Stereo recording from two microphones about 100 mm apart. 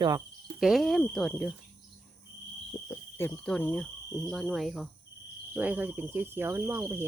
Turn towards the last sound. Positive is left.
turn(degrees=-25)  # may be behind; listen again after turning